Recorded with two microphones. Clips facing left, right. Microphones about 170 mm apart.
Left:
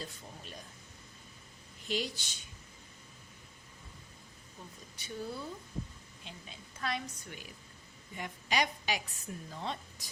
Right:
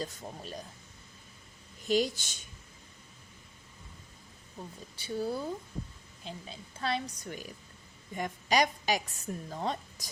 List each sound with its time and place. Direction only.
0.0 s a sound: 40° right (ahead or behind)
1.9 s a woman's voice: 45° right (ahead or behind)
4.9 s a woman's voice: 35° right (ahead or behind)
7.3 s a woman's voice: 40° right (ahead or behind)